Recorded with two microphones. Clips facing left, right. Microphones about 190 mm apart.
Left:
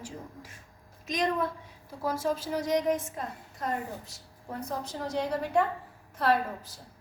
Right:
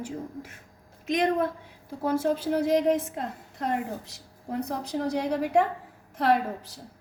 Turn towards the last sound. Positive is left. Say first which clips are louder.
# right 3 dB
turn(degrees=-65)  # may be behind; listen again after turning